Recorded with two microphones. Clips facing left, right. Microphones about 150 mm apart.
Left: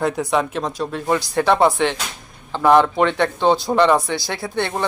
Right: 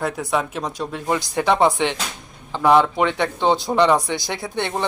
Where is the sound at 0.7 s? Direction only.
15° right (ahead or behind).